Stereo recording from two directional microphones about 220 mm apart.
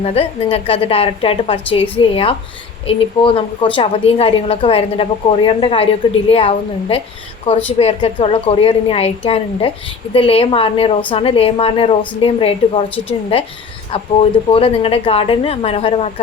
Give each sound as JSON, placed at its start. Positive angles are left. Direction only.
{"t": 0.0, "sound": "a woman's voice", "side_deg": 25}